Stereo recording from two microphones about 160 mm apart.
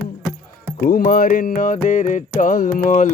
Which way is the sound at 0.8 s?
65° left (ahead or behind).